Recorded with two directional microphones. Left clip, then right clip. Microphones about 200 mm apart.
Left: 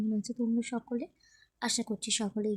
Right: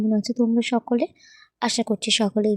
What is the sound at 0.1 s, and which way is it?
A woman's voice, 35° right (ahead or behind).